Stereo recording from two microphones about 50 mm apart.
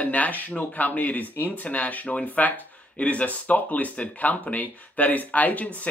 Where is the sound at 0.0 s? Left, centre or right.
Left.